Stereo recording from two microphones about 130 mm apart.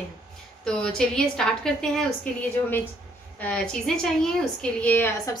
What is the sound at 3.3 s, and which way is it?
A woman's voice, 10° left (ahead or behind).